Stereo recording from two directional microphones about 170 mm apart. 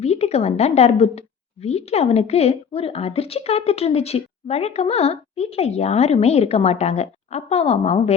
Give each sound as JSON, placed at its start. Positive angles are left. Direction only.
{"t": 0.0, "sound": "speech", "side_deg": 40}